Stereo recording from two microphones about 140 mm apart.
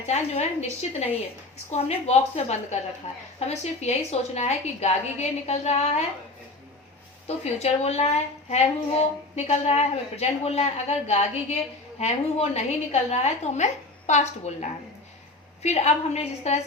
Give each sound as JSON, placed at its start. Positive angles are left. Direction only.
{"t": 0.0, "sound": "a woman's voice", "side_deg": 50}
{"t": 7.3, "sound": "a woman's voice", "side_deg": 50}